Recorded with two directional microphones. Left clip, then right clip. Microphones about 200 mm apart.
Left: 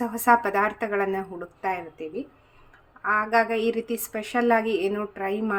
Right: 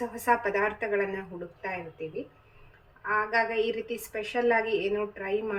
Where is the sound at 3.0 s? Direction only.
60° left (ahead or behind).